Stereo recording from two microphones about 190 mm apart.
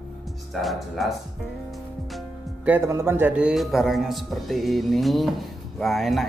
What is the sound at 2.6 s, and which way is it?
A man's voice, 10° right (ahead or behind).